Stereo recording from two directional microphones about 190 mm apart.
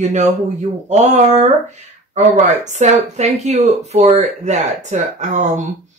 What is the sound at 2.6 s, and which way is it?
Speech, 40° right (ahead or behind).